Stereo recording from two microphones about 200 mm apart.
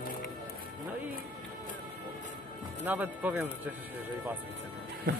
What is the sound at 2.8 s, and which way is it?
Speech, 10° right (ahead or behind).